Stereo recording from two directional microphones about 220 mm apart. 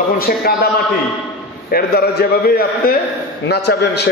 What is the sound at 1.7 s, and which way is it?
A man's voice, 45° left (ahead or behind).